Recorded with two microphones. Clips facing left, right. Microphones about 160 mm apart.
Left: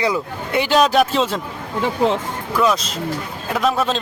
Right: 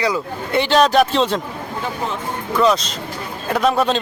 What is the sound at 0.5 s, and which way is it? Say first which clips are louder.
Speech: right 1 dB; 10° left (ahead or behind).